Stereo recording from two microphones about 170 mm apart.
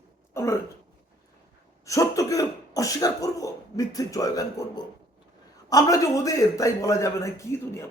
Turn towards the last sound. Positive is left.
turn(degrees=15)  # may be behind; listen again after turning